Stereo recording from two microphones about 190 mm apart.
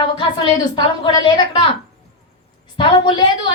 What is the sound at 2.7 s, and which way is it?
Speech, 25° left (ahead or behind).